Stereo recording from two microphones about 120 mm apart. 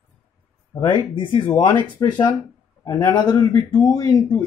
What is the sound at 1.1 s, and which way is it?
Speech, 45° left (ahead or behind).